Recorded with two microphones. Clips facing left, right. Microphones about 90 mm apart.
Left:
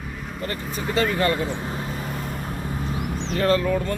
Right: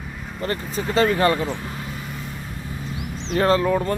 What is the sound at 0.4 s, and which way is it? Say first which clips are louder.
Speech: right 3 dB; 35° right (ahead or behind).